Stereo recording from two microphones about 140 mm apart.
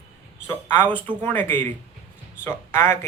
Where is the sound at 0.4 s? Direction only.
15° left (ahead or behind).